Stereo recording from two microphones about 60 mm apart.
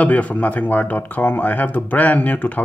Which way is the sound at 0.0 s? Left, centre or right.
Left.